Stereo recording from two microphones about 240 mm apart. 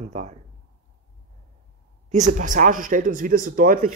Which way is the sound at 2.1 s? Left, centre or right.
Right.